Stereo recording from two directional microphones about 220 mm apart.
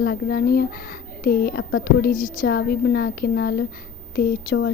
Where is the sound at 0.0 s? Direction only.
45° left (ahead or behind).